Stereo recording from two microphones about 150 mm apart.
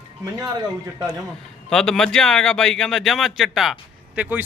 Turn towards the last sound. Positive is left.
turn(degrees=-10)  # may be behind; listen again after turning